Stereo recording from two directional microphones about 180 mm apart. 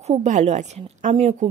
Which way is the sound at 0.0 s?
40° right (ahead or behind).